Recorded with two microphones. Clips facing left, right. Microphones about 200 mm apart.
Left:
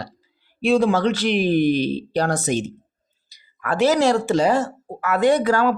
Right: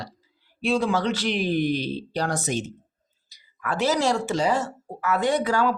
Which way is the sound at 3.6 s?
65° left (ahead or behind).